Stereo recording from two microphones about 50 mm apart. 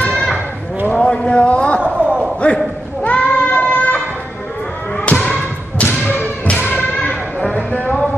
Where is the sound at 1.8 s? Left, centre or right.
Right.